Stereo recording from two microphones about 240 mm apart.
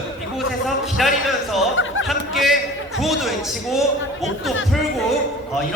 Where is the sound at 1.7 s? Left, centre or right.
Left.